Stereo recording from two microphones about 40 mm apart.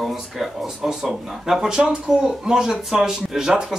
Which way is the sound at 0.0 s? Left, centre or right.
Centre.